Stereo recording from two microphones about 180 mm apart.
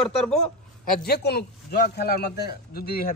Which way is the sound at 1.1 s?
65° left (ahead or behind).